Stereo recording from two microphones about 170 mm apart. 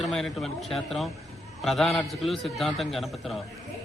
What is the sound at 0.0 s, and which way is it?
A man's voice, centre (ahead or behind).